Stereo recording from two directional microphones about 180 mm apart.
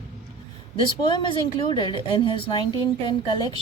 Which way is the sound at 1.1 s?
25° left (ahead or behind).